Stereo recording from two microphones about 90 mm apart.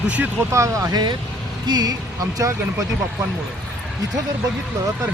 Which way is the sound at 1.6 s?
50° right (ahead or behind).